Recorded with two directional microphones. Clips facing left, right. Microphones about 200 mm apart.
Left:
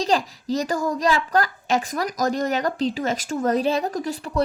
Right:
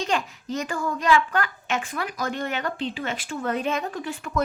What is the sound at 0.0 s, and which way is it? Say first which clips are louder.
A child's voice: left 4 dB; 35° left (ahead or behind).